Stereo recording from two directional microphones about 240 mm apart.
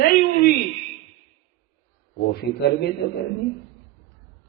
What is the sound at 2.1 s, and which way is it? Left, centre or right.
Speech, left.